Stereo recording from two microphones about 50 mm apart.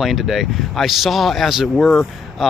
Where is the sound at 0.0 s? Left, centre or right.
Centre.